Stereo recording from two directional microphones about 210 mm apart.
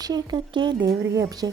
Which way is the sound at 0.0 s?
20° right (ahead or behind).